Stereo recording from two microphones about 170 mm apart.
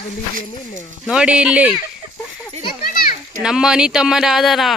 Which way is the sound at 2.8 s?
55° left (ahead or behind).